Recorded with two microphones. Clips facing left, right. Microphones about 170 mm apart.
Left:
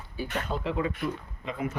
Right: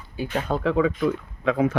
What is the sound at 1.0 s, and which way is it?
Speech, 90° right.